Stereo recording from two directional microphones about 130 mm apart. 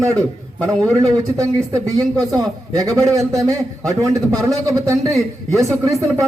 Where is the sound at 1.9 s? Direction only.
30° right (ahead or behind).